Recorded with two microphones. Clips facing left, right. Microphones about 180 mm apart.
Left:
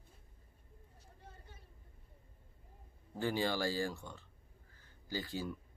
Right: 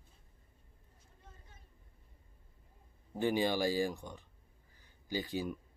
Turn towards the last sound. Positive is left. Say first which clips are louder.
# right 4 dB
turn(degrees=-15)  # may be behind; listen again after turning